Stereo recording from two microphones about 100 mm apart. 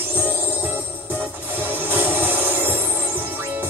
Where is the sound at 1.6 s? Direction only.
20° right (ahead or behind).